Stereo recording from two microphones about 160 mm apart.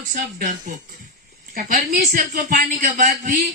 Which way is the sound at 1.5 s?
60° right (ahead or behind).